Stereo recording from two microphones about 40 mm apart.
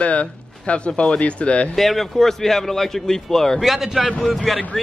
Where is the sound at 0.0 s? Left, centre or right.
Left.